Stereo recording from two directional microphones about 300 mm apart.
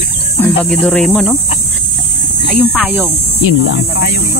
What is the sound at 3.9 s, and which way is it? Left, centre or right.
Speech, left.